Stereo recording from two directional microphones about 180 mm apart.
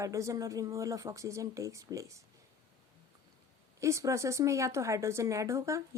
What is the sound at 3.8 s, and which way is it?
A woman's voice, 15° right (ahead or behind).